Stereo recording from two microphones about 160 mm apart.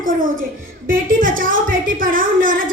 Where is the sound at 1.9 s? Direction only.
60° right (ahead or behind).